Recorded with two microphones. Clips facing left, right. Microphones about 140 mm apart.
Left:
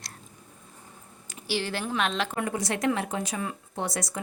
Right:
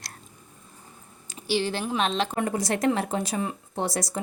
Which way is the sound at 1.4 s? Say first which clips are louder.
Right 4 dB; 20° right (ahead or behind).